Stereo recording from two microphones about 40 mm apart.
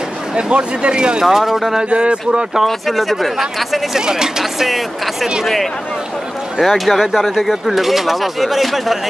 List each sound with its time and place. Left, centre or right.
0.3 s speech: right
1.2 s speech: centre
1.8 s speech: right
2.5 s speech: centre
3.9 s speech: centre
6.6 s speech: centre
7.0 s speech: centre